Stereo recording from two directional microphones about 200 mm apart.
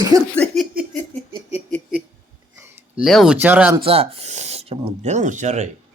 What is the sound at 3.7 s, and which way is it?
Speech, 30° right (ahead or behind).